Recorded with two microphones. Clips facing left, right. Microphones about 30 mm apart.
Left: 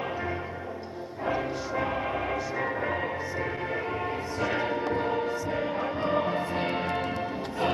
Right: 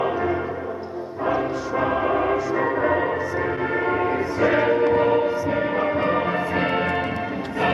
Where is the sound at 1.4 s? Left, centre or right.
Right.